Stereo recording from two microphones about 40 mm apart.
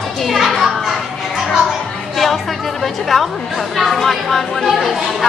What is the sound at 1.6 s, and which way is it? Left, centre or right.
Speech, centre.